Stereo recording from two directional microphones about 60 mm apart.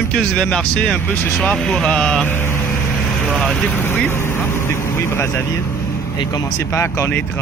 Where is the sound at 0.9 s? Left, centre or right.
Left.